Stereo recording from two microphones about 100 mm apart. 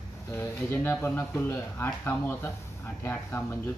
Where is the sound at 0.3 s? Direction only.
25° left (ahead or behind).